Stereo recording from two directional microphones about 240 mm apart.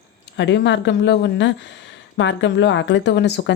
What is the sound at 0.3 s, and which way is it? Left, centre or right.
Speech, left.